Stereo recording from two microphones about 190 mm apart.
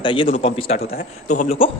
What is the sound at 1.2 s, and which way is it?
Speech, 40° left (ahead or behind).